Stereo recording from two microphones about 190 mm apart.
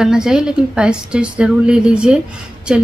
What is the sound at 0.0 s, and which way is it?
A woman's voice, 5° right (ahead or behind).